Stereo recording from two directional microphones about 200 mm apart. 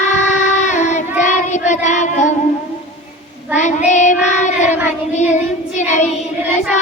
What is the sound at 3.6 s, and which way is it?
Child singing, 35° left (ahead or behind).